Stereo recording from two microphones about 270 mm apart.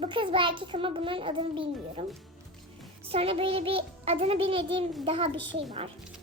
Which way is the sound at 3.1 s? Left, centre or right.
Right.